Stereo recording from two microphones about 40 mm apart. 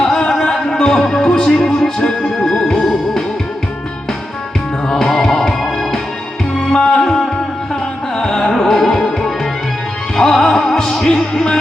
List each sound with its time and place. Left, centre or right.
0.0 s music: centre
4.9 s music: centre